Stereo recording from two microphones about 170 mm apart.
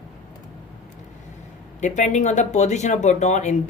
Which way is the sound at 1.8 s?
45° left (ahead or behind).